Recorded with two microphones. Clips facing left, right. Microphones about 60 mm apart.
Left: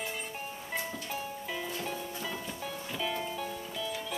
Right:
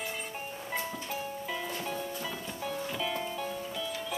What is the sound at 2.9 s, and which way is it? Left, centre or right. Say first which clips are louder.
Music: right 1 dB; centre.